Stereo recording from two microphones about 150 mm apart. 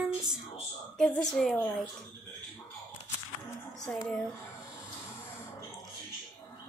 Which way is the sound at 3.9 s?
5° left (ahead or behind).